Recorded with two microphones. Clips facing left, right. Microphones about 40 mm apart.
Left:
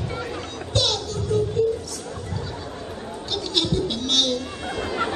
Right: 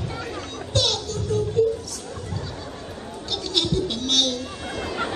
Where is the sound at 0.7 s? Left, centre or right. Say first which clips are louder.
Even; centre.